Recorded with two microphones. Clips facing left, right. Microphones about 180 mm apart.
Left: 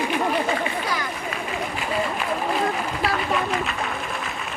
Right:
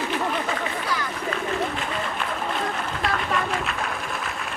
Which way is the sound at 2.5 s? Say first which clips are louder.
Left 4 dB; 5° left (ahead or behind).